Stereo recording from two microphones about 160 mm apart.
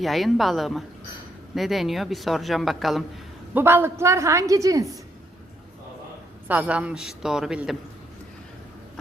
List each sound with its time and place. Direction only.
0.0 s speech: centre (ahead or behind)
3.5 s a woman's voice: 15° right (ahead or behind)
6.5 s speech: 10° right (ahead or behind)